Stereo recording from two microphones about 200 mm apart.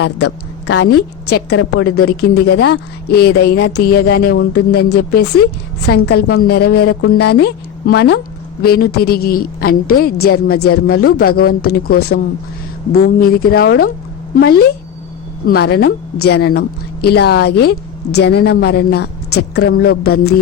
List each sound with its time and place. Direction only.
0.0 s a woman's voice: 70° left (ahead or behind)
0.9 s a woman's voice: 55° left (ahead or behind)